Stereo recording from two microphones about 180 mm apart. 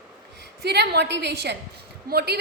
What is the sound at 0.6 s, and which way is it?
A woman's voice, 65° right (ahead or behind).